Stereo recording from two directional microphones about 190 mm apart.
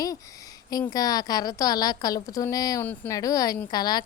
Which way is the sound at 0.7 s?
20° left (ahead or behind).